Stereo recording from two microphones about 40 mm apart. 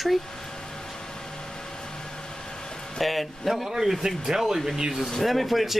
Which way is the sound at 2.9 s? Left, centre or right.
Centre.